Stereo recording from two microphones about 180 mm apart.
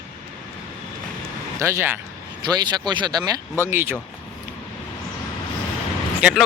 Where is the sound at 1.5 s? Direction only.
15° right (ahead or behind).